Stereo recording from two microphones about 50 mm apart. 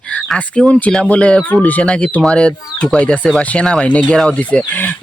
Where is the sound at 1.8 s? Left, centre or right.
Left.